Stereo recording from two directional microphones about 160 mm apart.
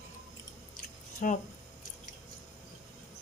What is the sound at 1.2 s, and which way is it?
Speech, 55° left (ahead or behind).